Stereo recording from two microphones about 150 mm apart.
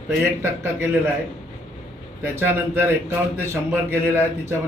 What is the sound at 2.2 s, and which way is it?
A man's voice, 15° right (ahead or behind).